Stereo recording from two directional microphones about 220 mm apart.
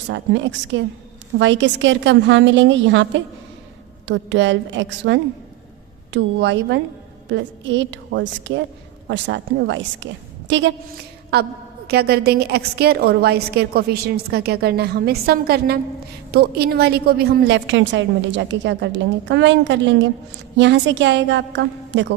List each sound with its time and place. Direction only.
0.1 s a woman's voice: 55° right (ahead or behind)
11.9 s a woman's voice: 45° right (ahead or behind)